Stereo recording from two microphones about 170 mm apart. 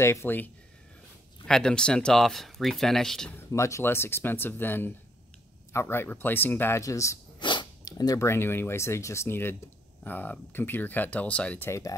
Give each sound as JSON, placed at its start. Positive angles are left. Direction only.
{"t": 0.0, "sound": "speech", "side_deg": 15}
{"t": 1.5, "sound": "speech", "side_deg": 5}